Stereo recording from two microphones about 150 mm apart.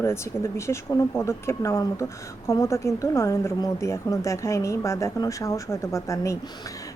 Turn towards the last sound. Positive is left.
turn(degrees=20)  # may be behind; listen again after turning